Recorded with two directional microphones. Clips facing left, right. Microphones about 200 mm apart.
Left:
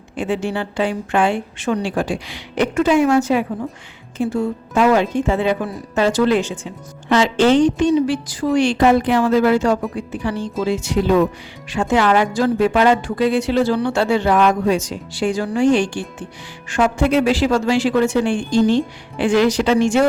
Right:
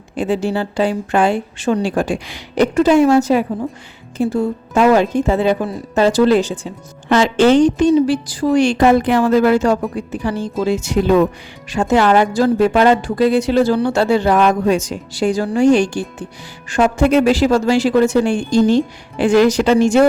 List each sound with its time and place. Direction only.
0.2 s speech: 35° right (ahead or behind)
2.0 s speech: 45° right (ahead or behind)